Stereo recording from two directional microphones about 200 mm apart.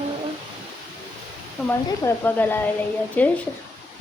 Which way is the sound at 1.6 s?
10° left (ahead or behind).